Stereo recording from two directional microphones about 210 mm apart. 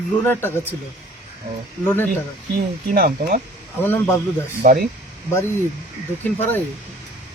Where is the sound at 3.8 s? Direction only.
10° left (ahead or behind).